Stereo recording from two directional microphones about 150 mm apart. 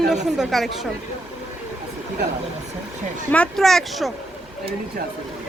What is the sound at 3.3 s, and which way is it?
Speech, 5° left (ahead or behind).